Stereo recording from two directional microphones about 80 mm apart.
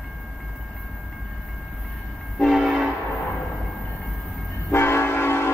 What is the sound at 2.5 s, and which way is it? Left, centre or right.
Train, centre.